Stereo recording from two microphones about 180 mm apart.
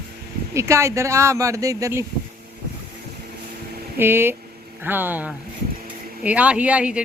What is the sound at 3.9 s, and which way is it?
Speech, 10° right (ahead or behind).